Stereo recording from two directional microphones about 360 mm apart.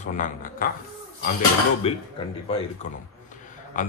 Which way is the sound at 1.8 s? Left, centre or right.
Centre.